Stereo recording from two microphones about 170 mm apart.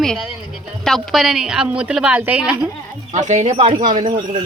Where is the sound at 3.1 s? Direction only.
45° right (ahead or behind).